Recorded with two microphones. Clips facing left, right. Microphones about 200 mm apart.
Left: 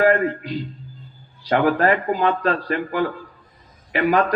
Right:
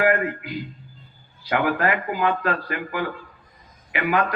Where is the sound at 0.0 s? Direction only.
35° left (ahead or behind).